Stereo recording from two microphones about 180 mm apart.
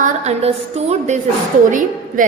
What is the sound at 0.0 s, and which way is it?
A woman's voice, 35° right (ahead or behind).